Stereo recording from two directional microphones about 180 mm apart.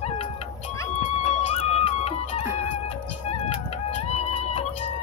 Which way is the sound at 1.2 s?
35° left (ahead or behind).